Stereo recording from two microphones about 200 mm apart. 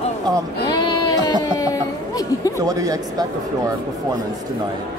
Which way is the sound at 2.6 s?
15° right (ahead or behind).